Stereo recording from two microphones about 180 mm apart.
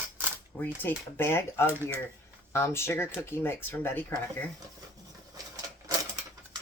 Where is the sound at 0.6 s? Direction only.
10° left (ahead or behind).